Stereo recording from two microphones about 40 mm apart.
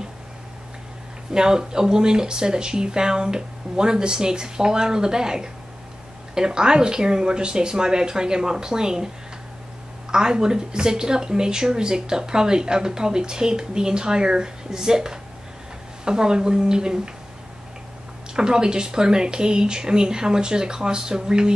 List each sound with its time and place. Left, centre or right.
1.3 s speech: centre
10.1 s speech: centre
18.3 s speech: centre